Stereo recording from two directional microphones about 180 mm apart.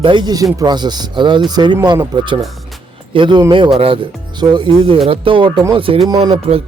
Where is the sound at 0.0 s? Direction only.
25° right (ahead or behind).